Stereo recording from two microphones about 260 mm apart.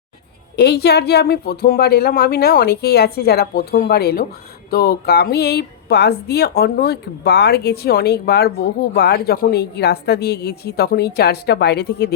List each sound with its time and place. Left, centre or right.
0.5 s speech: left